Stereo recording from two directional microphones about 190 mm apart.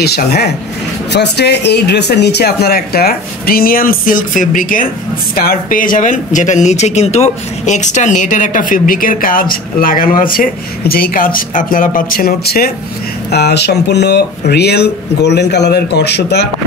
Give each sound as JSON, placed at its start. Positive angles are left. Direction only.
{"t": 0.0, "sound": "speech", "side_deg": 55}